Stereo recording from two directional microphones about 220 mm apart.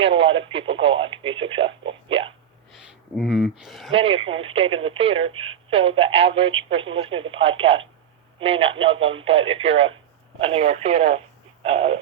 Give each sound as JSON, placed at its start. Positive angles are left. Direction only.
{"t": 0.0, "sound": "speech", "side_deg": -25}
{"t": 3.2, "sound": "speech", "side_deg": 0}
{"t": 3.9, "sound": "speech", "side_deg": -25}